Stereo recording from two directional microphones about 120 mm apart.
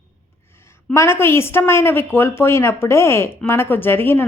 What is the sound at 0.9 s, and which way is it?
A woman's voice, 20° left (ahead or behind).